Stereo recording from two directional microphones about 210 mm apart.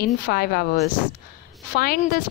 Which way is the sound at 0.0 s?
45° left (ahead or behind).